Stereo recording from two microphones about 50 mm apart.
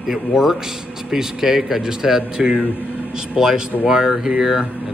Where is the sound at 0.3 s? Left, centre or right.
Centre.